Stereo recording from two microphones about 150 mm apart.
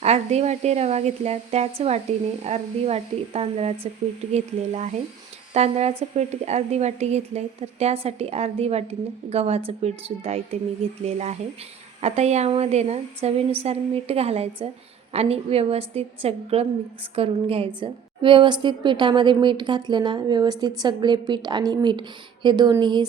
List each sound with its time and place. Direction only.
0.0 s a woman's voice: 45° right (ahead or behind); by 23.0 s 30° right (ahead or behind)